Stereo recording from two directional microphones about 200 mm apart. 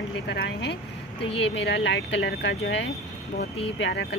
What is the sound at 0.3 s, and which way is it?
Speech, 55° left (ahead or behind).